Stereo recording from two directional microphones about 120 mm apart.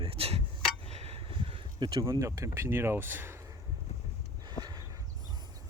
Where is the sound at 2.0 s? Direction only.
25° right (ahead or behind).